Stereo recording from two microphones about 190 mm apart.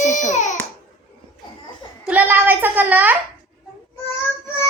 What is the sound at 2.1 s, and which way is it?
A woman's voice, 10° right (ahead or behind).